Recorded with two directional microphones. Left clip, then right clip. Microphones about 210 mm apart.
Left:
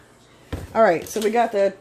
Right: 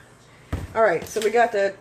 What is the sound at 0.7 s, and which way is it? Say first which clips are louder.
Speech: left 2 dB; 45° left (ahead or behind).